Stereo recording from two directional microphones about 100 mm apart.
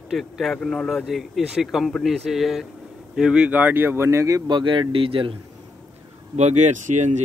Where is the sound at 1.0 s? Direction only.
5° right (ahead or behind); by 4.4 s 30° right (ahead or behind).